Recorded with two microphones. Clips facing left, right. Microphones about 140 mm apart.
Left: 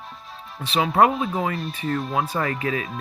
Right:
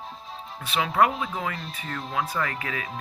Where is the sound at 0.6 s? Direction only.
25° left (ahead or behind).